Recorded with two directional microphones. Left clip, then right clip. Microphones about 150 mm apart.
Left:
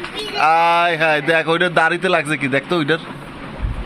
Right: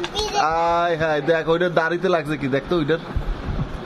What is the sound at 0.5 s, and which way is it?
A man's voice, centre (ahead or behind).